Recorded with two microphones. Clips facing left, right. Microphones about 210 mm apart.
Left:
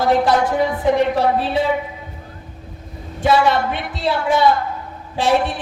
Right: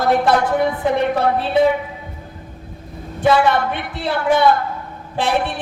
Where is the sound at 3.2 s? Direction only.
55° right (ahead or behind).